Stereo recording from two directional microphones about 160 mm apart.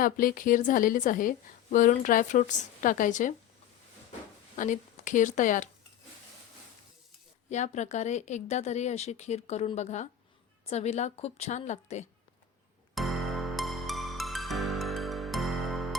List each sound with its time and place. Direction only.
0.0 s a woman's voice: 60° left (ahead or behind)
4.5 s speech: 55° left (ahead or behind)
7.5 s speech: 45° left (ahead or behind)
12.9 s music: centre (ahead or behind)